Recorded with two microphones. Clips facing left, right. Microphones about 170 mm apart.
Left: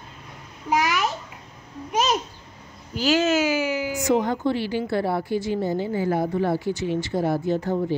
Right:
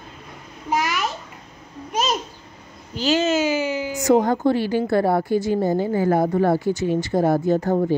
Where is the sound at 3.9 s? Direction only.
40° right (ahead or behind).